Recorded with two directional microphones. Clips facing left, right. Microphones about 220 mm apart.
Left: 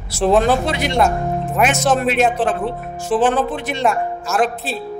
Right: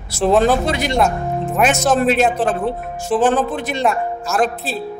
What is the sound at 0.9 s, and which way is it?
Music, centre (ahead or behind).